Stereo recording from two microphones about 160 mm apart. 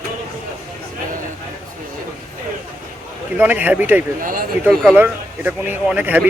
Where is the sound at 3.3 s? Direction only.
10° right (ahead or behind).